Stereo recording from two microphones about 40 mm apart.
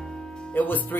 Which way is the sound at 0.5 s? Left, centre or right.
Left.